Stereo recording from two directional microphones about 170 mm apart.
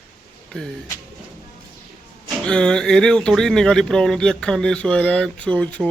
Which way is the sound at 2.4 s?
5° left (ahead or behind).